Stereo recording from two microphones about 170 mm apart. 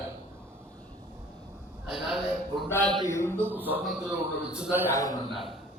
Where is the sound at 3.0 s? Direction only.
15° left (ahead or behind).